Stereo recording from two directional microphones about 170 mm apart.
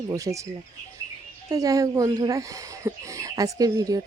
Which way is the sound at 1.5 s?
20° right (ahead or behind).